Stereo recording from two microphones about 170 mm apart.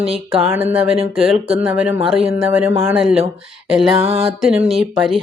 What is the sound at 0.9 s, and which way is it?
Speech, 35° right (ahead or behind).